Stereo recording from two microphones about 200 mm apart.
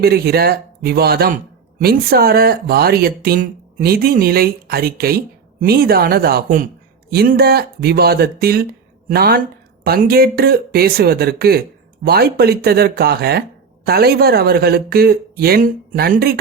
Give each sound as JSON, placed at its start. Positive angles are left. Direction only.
{"t": 0.0, "sound": "speech", "side_deg": -50}